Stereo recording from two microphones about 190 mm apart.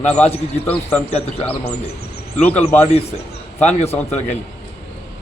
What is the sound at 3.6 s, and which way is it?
Speech, 35° left (ahead or behind).